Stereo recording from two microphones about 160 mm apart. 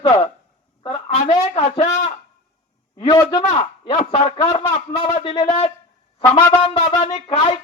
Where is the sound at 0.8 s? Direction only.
30° left (ahead or behind).